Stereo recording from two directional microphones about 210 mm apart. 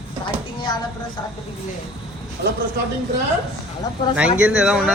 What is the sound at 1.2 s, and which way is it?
Speech, 20° left (ahead or behind).